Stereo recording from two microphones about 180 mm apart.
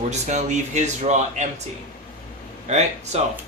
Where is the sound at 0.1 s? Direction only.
40° right (ahead or behind).